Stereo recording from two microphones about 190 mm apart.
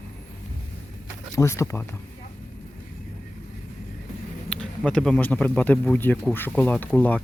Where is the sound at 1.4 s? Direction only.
15° left (ahead or behind).